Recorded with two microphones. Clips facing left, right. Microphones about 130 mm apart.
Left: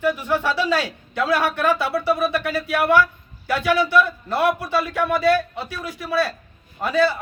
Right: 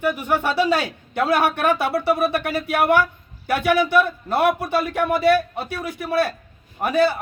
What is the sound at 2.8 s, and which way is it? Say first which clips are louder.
Speech: even; 55° right (ahead or behind).